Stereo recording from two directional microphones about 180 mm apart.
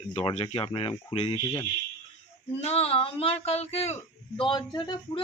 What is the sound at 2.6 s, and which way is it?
A man's voice, 35° left (ahead or behind).